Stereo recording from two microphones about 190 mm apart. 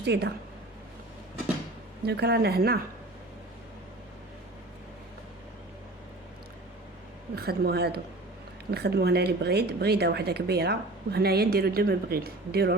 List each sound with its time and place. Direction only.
0.0 s a woman's voice: 60° right (ahead or behind)
2.0 s speech: 60° right (ahead or behind)
7.3 s speech: 55° right (ahead or behind)